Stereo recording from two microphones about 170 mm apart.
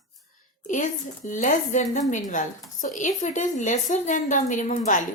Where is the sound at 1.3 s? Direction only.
50° left (ahead or behind).